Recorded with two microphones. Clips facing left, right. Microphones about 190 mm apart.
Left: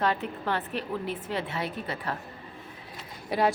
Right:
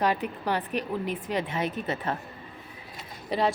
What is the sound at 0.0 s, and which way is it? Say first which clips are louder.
Speech: right 2 dB; 15° right (ahead or behind).